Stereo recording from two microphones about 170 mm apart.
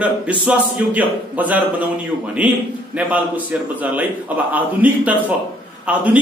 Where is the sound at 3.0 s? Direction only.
10° right (ahead or behind).